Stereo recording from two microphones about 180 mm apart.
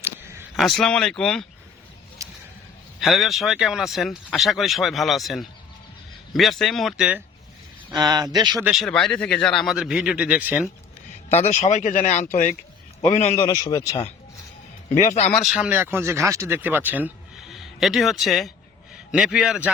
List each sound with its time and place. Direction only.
0.0 s a sound: 15° right (ahead or behind)
0.5 s speech: centre (ahead or behind)
2.2 s a sound: 15° right (ahead or behind)
3.0 s speech: centre (ahead or behind)
7.9 s speech: 20° right (ahead or behind)
8.6 s speech: centre (ahead or behind)
11.3 s speech: 40° left (ahead or behind)
13.3 s speech: 15° left (ahead or behind)
14.9 s speech: 40° left (ahead or behind)
15.3 s a man's voice: centre (ahead or behind)